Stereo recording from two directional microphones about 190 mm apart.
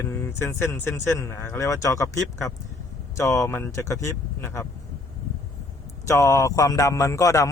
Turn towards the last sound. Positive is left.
turn(degrees=15)  # may be behind; listen again after turning